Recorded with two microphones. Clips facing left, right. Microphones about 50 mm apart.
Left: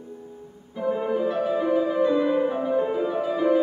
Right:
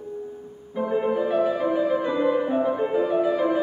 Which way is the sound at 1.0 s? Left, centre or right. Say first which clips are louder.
Right 4 dB; centre.